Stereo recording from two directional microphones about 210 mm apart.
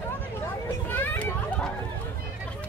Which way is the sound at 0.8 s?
10° left (ahead or behind).